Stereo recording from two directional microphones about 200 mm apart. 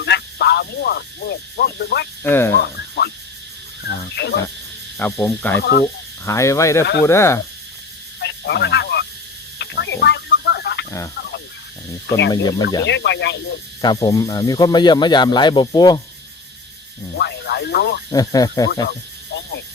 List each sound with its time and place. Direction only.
0.0 s speech: 55° left (ahead or behind)
2.2 s speech: 10° left (ahead or behind)
2.6 s a sound: 55° left (ahead or behind)
4.1 s speech: 60° left (ahead or behind)
4.9 s speech: 10° left (ahead or behind)
8.2 s a sound: 60° left (ahead or behind)
12.3 s speech: 20° left (ahead or behind)
12.8 s speech: 60° left (ahead or behind)
13.8 s speech: 20° left (ahead or behind)
17.2 s a sound: 55° left (ahead or behind)
18.1 s speech: 20° left (ahead or behind)
18.9 s a sound: 60° left (ahead or behind)